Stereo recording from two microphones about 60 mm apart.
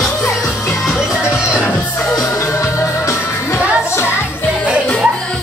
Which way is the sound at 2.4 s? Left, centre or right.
Left.